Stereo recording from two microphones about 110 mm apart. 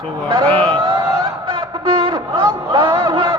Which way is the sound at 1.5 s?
55° right (ahead or behind).